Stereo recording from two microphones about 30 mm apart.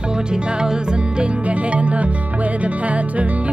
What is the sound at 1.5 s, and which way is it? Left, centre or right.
Music, right.